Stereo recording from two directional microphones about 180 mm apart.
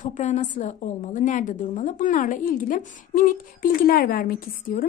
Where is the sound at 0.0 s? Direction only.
40° left (ahead or behind).